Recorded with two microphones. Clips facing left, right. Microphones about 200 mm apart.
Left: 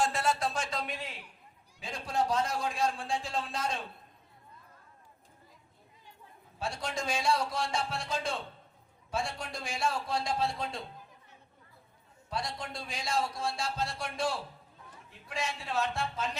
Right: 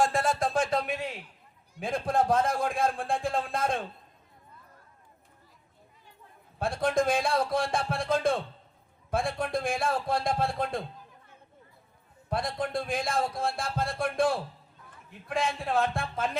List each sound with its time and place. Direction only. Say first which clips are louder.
0.0 s a sound: right 4 dB; 50° right (ahead or behind)
1.8 s a man's voice: right 6 dB; 55° right (ahead or behind)
6.6 s a man's voice: right 10 dB; 55° right (ahead or behind)
12.3 s speech: right 7 dB; 55° right (ahead or behind)